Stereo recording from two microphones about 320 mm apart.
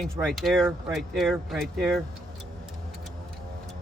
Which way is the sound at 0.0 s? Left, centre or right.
Centre.